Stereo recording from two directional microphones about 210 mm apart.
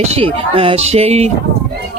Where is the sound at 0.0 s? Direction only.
30° right (ahead or behind).